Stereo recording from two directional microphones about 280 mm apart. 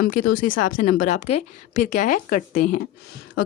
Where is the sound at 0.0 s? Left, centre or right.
Left.